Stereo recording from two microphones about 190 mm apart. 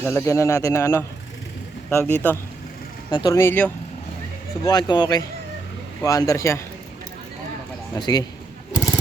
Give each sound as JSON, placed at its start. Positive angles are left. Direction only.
{"t": 0.1, "sound": "a man's voice", "side_deg": 15}
{"t": 3.1, "sound": "a man's voice", "side_deg": 20}
{"t": 7.9, "sound": "a man's voice", "side_deg": 20}
{"t": 8.7, "sound": "a sound", "side_deg": 15}